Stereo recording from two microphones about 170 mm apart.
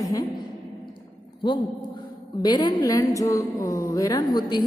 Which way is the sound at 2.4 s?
25° left (ahead or behind).